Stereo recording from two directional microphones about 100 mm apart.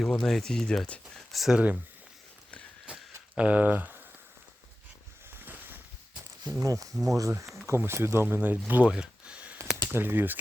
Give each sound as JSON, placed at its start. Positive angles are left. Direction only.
{"t": 0.0, "sound": "speech", "side_deg": 5}
{"t": 1.3, "sound": "speech", "side_deg": -5}
{"t": 2.8, "sound": "a sound", "side_deg": -10}
{"t": 5.3, "sound": "a sound", "side_deg": -20}
{"t": 6.6, "sound": "speech", "side_deg": -35}
{"t": 6.9, "sound": "speech", "side_deg": 0}
{"t": 7.2, "sound": "speech", "side_deg": -30}
{"t": 9.7, "sound": "speech", "side_deg": -25}